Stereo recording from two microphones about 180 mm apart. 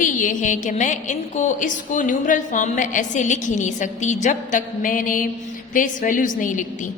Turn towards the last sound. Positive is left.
turn(degrees=45)  # may be behind; listen again after turning